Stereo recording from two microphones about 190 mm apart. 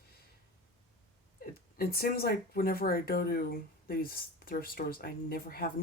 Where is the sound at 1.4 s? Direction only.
55° left (ahead or behind).